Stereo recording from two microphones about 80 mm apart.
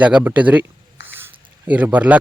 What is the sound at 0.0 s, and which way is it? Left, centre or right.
Speech, centre.